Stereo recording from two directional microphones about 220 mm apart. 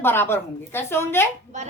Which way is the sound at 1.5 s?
30° right (ahead or behind).